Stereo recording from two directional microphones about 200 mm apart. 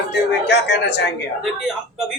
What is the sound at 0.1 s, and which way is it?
Speech, 55° left (ahead or behind).